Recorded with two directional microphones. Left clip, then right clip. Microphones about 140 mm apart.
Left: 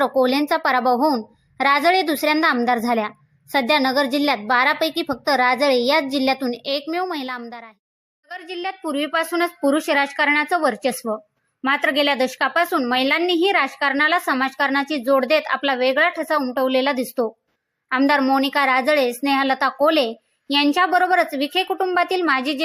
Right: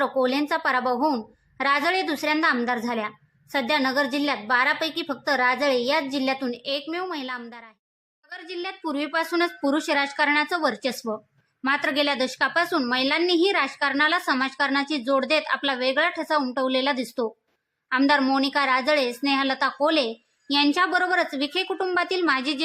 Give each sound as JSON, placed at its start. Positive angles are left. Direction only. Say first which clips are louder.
{"t": 0.0, "sound": "a woman's voice", "louder": "left 5 dB", "side_deg": 30}